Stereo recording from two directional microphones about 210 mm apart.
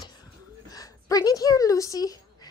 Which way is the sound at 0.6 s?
15° left (ahead or behind).